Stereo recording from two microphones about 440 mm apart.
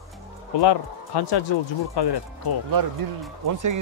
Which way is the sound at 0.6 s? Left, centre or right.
Left.